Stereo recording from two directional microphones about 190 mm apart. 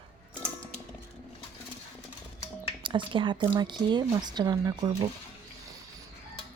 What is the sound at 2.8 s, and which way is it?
Speech, 25° right (ahead or behind).